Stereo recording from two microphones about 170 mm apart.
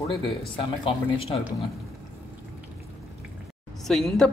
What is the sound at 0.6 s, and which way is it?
Speech, 30° left (ahead or behind).